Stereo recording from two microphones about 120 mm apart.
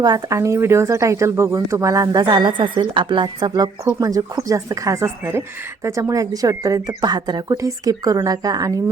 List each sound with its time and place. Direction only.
0.0 s speech: 30° right (ahead or behind)
2.2 s speech: 40° right (ahead or behind)